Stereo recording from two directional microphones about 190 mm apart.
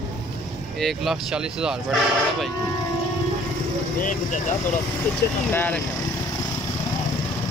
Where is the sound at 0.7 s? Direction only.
Centre (ahead or behind).